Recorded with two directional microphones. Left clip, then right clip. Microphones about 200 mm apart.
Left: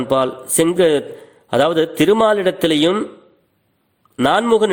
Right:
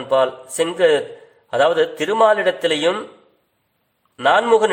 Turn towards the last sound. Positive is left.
turn(degrees=35)  # may be behind; listen again after turning